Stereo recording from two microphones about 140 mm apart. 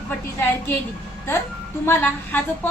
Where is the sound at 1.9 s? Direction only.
15° left (ahead or behind).